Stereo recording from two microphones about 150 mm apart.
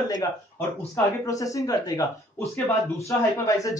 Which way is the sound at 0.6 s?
20° left (ahead or behind).